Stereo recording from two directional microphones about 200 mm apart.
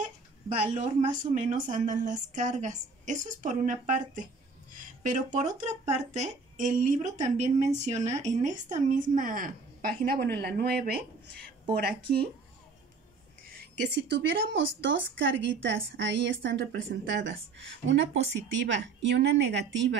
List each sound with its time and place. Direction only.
1.1 s speech: 40° right (ahead or behind)
13.6 s a woman's voice: 55° right (ahead or behind)